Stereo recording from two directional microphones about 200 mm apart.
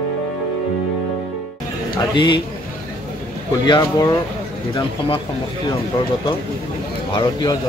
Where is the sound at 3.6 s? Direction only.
20° left (ahead or behind).